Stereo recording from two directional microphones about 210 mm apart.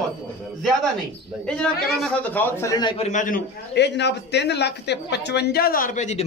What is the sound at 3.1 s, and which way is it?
A man's voice, 40° left (ahead or behind).